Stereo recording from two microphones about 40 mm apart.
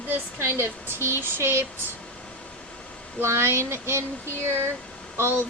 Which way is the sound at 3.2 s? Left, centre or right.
Right.